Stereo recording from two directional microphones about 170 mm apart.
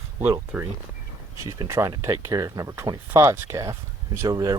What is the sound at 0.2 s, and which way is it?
Speech, 10° right (ahead or behind).